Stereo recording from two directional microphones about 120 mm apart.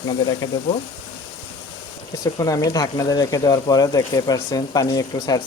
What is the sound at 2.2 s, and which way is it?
Speech, 30° left (ahead or behind).